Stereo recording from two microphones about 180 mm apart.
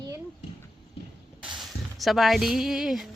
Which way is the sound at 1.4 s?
Centre (ahead or behind).